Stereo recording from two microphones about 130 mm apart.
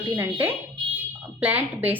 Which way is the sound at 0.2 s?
15° right (ahead or behind).